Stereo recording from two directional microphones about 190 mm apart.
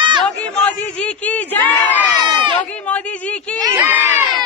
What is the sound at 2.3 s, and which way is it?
Crowd, 25° right (ahead or behind).